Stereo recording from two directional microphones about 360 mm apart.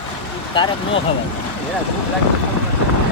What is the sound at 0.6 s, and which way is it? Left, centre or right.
Speech, centre.